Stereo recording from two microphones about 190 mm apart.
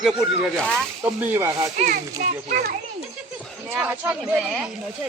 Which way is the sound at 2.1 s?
55° right (ahead or behind).